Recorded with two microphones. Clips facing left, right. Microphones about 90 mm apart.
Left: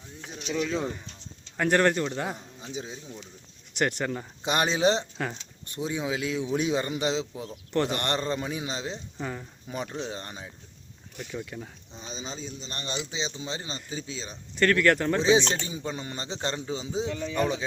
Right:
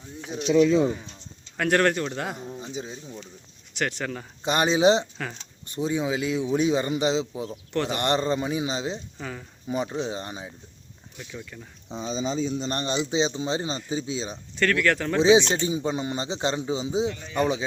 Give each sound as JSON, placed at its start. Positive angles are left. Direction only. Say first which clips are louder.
{"t": 1.5, "sound": "speech", "louder": "right 1 dB", "side_deg": 5}
{"t": 5.2, "sound": "speech", "louder": "left 2 dB", "side_deg": 5}
{"t": 9.1, "sound": "speech", "louder": "left 1 dB", "side_deg": 5}
{"t": 9.6, "sound": "speech", "louder": "right 6 dB", "side_deg": -10}
{"t": 11.5, "sound": "speech", "louder": "left 4 dB", "side_deg": 15}
{"t": 11.9, "sound": "speech", "louder": "right 17 dB", "side_deg": -90}
{"t": 12.5, "sound": "a man's voice", "louder": "right 12 dB", "side_deg": -75}
{"t": 12.7, "sound": "speech", "louder": "right 7 dB", "side_deg": -35}
{"t": 14.5, "sound": "speech", "louder": "left 1 dB", "side_deg": 5}
{"t": 15.1, "sound": "speech", "louder": "right 4 dB", "side_deg": -15}